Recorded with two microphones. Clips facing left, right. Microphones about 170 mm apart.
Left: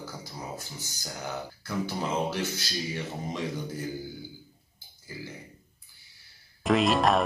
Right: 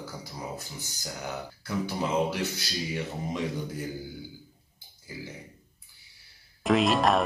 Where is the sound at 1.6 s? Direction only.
10° right (ahead or behind).